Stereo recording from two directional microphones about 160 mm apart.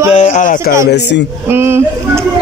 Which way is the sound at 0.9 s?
90° left.